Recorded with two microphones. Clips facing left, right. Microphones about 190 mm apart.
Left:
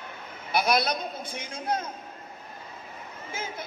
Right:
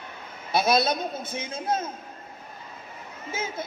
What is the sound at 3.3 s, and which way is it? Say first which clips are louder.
Speech: right 4 dB; 25° right (ahead or behind).